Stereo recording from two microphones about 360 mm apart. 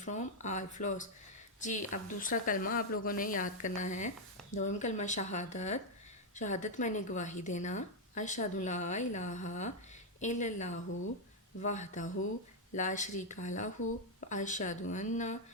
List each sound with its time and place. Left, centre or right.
0.0 s speech: centre